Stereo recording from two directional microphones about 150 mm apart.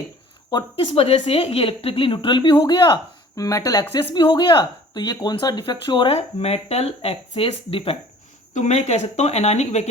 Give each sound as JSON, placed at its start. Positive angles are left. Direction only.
{"t": 0.9, "sound": "a woman's voice", "side_deg": 40}
{"t": 6.1, "sound": "speech", "side_deg": 45}